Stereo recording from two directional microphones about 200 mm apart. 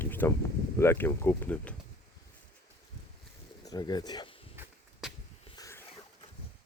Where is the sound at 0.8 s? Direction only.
10° left (ahead or behind).